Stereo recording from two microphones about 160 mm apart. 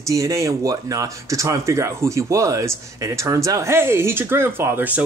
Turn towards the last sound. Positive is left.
turn(degrees=-10)  # may be behind; listen again after turning